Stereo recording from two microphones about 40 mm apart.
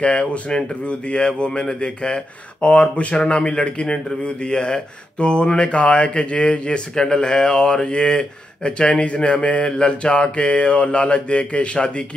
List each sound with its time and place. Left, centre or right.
0.0 s speech: left